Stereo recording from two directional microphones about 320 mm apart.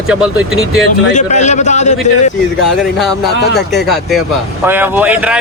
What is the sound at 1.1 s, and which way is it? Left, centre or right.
A man's voice, left.